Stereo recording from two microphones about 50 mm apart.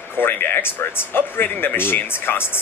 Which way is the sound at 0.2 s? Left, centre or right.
Left.